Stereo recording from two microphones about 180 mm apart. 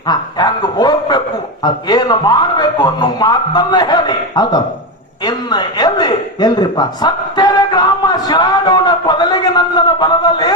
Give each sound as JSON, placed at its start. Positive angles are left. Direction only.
{"t": 0.1, "sound": "a man's voice", "side_deg": 25}